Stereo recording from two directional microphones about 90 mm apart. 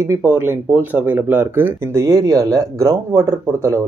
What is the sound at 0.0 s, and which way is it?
Speech, 25° right (ahead or behind).